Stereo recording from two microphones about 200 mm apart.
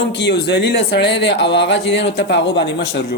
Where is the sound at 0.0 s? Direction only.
65° left (ahead or behind).